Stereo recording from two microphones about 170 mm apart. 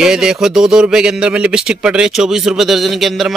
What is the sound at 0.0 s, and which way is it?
Speech, 5° right (ahead or behind).